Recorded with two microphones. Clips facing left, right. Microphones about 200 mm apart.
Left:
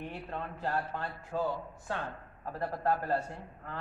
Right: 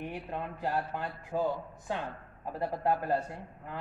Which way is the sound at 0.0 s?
15° right (ahead or behind).